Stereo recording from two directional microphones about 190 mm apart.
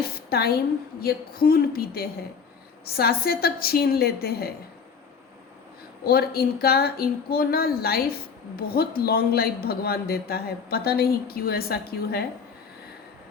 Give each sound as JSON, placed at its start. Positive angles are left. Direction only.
{"t": 0.3, "sound": "a man's voice", "side_deg": 55}
{"t": 6.1, "sound": "a man's voice", "side_deg": 55}